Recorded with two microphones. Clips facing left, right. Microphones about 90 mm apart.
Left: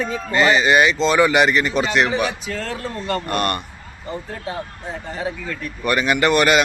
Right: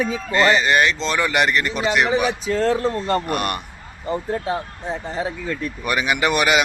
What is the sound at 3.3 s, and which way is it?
Speech, 5° right (ahead or behind).